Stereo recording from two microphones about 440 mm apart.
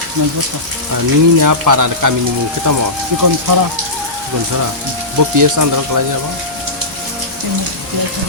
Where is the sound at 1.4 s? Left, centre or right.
Right.